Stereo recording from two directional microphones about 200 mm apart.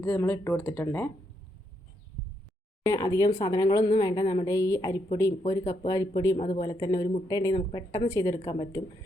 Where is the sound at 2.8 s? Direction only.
15° left (ahead or behind).